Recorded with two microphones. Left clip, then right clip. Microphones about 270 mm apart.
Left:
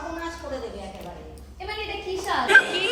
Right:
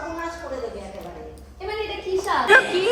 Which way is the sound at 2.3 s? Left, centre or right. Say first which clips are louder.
Right 1 dB; centre.